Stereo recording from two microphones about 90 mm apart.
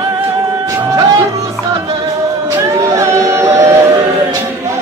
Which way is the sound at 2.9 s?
35° right (ahead or behind).